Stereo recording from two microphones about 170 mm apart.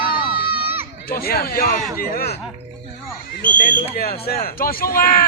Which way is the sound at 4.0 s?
65° left (ahead or behind).